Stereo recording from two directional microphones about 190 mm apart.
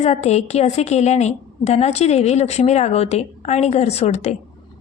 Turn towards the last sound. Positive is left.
turn(degrees=35)  # may be behind; listen again after turning